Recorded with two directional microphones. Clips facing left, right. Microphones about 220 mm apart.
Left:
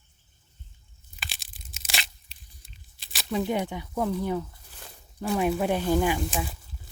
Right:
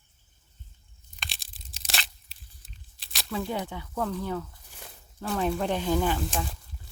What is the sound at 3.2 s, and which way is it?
Speech, 20° left (ahead or behind).